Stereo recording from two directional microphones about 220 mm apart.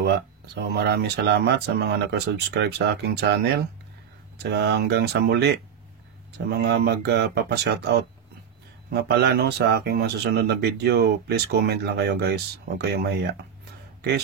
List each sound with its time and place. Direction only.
0.6 s speech: 50° right (ahead or behind)